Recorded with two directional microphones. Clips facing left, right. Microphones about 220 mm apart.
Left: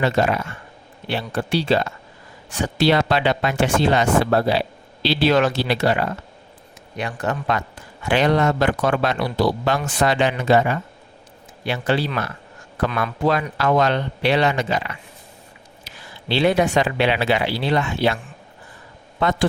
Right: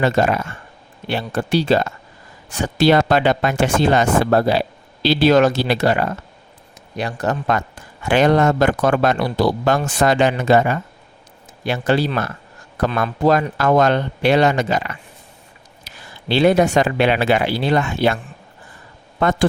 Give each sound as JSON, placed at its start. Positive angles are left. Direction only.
{"t": 0.0, "sound": "speech", "side_deg": -45}
{"t": 16.3, "sound": "speech", "side_deg": -45}
{"t": 19.2, "sound": "speech", "side_deg": -50}